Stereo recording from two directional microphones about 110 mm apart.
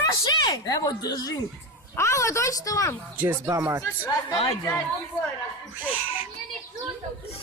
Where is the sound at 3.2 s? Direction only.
25° right (ahead or behind).